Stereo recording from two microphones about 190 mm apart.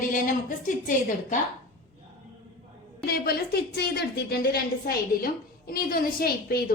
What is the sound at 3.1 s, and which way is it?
A woman's voice, 55° left (ahead or behind).